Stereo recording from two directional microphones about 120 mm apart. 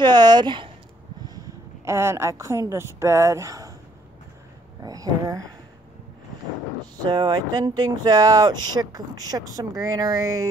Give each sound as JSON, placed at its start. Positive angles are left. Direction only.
{"t": 0.0, "sound": "speech", "side_deg": -35}
{"t": 1.9, "sound": "a woman's voice", "side_deg": -20}
{"t": 4.8, "sound": "speech", "side_deg": -30}
{"t": 7.0, "sound": "speech", "side_deg": -35}